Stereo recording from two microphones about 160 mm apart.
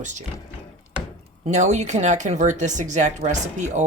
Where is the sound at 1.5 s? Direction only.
45° right (ahead or behind).